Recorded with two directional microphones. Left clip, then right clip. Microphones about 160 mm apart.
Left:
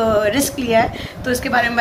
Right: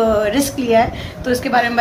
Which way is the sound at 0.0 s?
10° right (ahead or behind).